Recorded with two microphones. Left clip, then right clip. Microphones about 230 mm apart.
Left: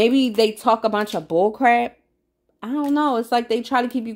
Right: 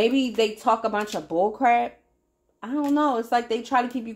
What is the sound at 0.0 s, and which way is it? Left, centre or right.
Speech, left.